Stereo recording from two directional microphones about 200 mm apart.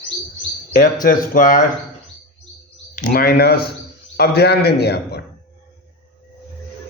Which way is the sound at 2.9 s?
45° left (ahead or behind).